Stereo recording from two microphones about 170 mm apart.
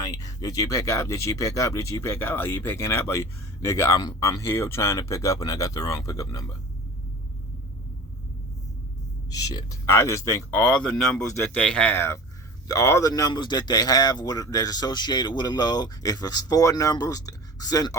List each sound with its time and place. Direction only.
0.0 s speech: 20° left (ahead or behind)
9.3 s speech: 20° left (ahead or behind)
10.8 s speech: 5° left (ahead or behind); by 17.9 s 20° left (ahead or behind)